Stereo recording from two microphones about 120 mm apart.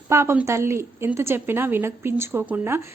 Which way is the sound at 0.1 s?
20° right (ahead or behind).